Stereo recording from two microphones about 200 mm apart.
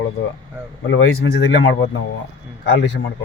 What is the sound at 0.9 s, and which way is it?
Speech, 85° left.